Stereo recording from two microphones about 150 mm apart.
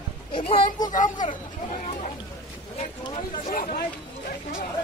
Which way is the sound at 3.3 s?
70° left (ahead or behind).